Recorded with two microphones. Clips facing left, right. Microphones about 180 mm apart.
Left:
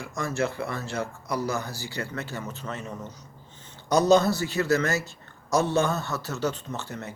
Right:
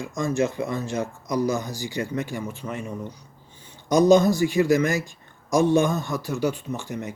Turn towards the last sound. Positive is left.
turn(degrees=-15)  # may be behind; listen again after turning